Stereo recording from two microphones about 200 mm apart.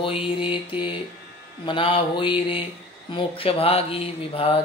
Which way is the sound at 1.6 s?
25° left (ahead or behind).